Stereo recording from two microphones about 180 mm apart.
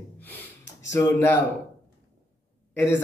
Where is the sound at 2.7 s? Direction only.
15° left (ahead or behind).